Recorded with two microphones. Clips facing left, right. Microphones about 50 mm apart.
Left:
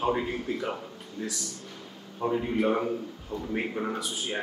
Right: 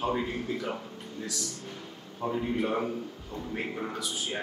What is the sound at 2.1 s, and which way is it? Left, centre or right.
A man's voice, centre.